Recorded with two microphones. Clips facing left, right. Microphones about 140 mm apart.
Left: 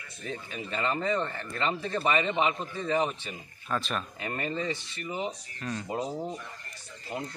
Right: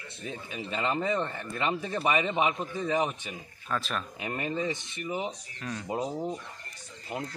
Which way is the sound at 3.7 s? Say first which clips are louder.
Left 1 dB; centre (ahead or behind).